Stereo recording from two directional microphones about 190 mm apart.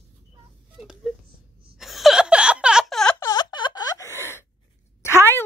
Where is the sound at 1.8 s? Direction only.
Centre (ahead or behind).